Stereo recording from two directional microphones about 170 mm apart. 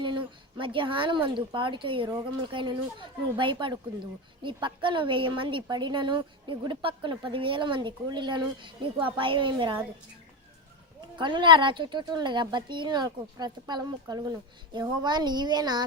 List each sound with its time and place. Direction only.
0.0 s a woman's voice: 30° right (ahead or behind)
11.2 s a woman's voice: 30° right (ahead or behind)